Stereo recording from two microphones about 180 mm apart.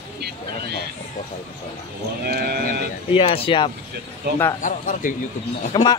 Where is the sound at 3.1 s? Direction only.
30° left (ahead or behind).